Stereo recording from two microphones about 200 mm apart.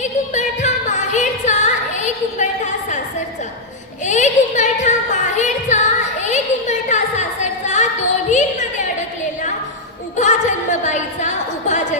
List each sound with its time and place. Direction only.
0.0 s music: 35° left (ahead or behind)
4.0 s music: 35° left (ahead or behind)
6.2 s a sound: 35° left (ahead or behind)